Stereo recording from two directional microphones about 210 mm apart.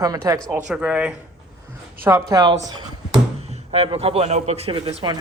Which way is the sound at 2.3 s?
20° right (ahead or behind).